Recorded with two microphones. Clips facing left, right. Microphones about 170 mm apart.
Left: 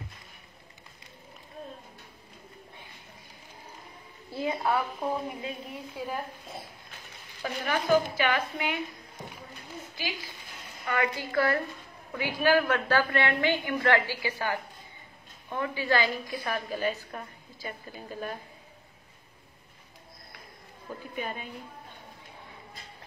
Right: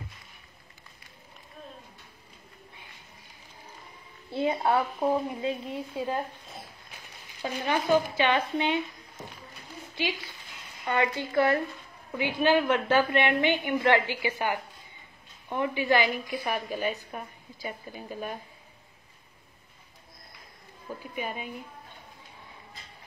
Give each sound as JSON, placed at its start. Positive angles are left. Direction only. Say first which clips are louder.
{"t": 4.3, "sound": "a woman's voice", "louder": "right 3 dB", "side_deg": -25}
{"t": 7.4, "sound": "a woman's voice", "louder": "right 1 dB", "side_deg": -25}
{"t": 9.9, "sound": "a woman's voice", "louder": "right 7 dB", "side_deg": -25}
{"t": 21.1, "sound": "a woman's voice", "louder": "right 1 dB", "side_deg": -10}